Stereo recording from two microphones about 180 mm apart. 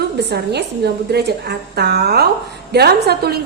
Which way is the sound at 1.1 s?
65° right (ahead or behind).